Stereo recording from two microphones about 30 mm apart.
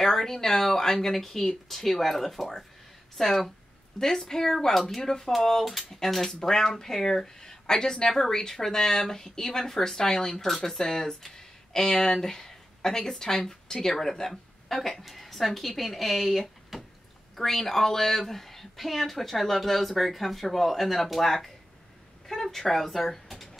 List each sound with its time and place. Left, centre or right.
0.0 s speech: centre
5.7 s a woman's voice: centre
16.7 s a sound: centre
17.4 s speech: centre